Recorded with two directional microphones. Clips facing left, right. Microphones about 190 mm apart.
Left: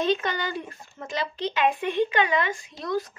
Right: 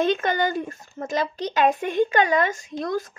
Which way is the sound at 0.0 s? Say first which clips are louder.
Right 4 dB; 50° right (ahead or behind).